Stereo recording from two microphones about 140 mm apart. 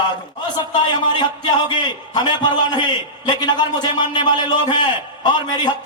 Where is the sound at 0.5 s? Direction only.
30° left (ahead or behind).